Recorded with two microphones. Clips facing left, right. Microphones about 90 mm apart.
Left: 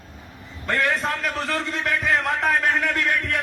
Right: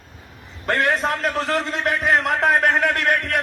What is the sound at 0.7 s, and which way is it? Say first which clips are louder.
A man's voice: right 3 dB; 20° right (ahead or behind).